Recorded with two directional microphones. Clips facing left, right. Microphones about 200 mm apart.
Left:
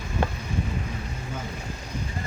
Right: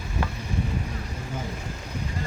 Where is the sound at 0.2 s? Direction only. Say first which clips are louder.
Left 5 dB; 25° left (ahead or behind).